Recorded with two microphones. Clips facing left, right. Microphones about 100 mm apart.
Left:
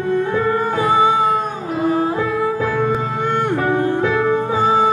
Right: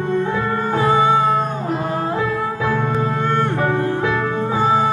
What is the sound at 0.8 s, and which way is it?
Music, 15° left (ahead or behind).